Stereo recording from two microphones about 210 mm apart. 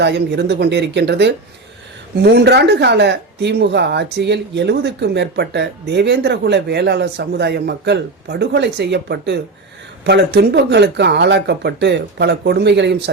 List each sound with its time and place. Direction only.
0.0 s speech: 55° right (ahead or behind)